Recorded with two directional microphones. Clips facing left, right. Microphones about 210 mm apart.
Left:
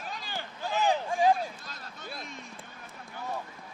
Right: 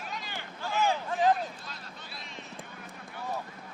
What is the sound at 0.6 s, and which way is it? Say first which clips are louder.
Speech: left 1 dB; 15° left (ahead or behind).